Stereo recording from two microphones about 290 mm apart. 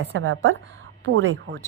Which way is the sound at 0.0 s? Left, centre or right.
Right.